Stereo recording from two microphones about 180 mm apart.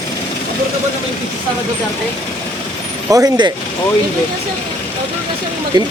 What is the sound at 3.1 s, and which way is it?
Speech, 20° right (ahead or behind).